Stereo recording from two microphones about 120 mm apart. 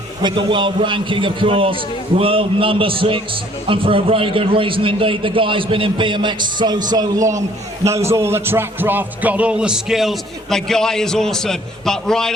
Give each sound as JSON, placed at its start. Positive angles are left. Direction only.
{"t": 0.2, "sound": "a man's voice", "side_deg": -40}